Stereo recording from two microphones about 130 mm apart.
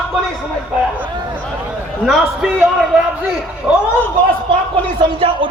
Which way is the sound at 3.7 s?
10° right (ahead or behind).